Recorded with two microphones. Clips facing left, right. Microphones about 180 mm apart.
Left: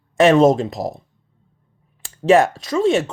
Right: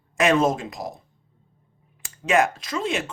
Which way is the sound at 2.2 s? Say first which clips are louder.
Left 7 dB; 30° left (ahead or behind).